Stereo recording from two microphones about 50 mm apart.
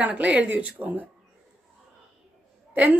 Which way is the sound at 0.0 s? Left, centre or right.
Right.